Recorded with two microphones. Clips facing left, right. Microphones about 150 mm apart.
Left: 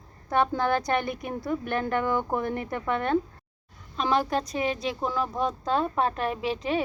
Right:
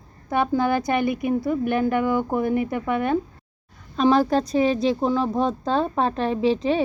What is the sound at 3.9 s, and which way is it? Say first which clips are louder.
A woman's voice: right 7 dB; 35° right (ahead or behind).